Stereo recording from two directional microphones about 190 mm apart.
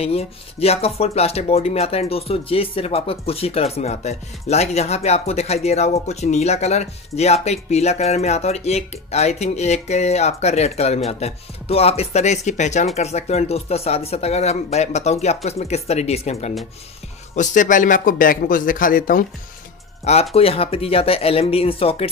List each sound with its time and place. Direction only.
0.0 s speech: 30° left (ahead or behind)
20.3 s speech: 30° left (ahead or behind)